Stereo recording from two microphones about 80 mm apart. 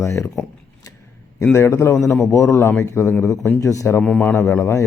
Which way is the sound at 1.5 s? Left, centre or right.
Left.